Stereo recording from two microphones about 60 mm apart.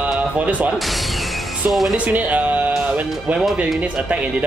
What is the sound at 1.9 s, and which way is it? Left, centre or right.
Speech, right.